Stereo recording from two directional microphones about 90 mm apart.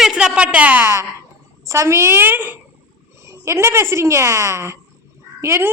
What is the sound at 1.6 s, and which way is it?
A woman's voice, 35° right (ahead or behind).